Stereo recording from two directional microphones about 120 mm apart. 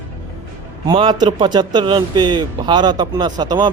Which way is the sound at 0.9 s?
40° right (ahead or behind).